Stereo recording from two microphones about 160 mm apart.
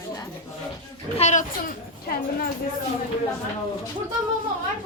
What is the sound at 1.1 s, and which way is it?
A child's voice, 45° left (ahead or behind).